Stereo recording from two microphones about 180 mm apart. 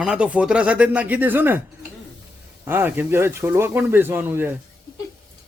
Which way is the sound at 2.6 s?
10° right (ahead or behind).